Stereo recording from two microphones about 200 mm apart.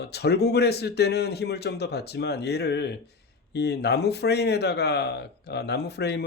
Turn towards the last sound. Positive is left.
turn(degrees=55)  # may be behind; listen again after turning